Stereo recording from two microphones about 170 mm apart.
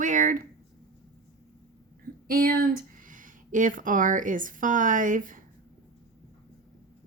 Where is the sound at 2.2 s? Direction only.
60° right (ahead or behind).